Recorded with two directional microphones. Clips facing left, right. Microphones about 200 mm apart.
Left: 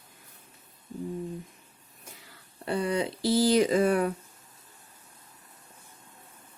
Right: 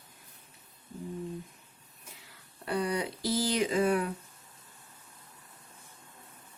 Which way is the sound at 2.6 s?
25° left (ahead or behind).